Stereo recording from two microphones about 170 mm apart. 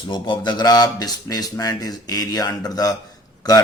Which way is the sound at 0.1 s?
25° left (ahead or behind).